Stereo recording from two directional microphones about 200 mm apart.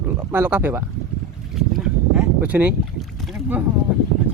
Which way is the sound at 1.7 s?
5° right (ahead or behind).